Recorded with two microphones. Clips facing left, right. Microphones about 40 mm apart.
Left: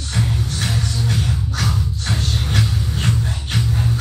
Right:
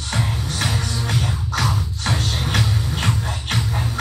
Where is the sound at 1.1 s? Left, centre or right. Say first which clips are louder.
Left 1 dB; right.